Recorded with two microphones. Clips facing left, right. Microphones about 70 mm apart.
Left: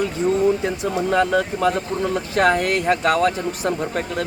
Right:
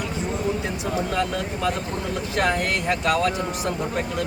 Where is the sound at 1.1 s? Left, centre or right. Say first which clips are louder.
Left 7 dB; left.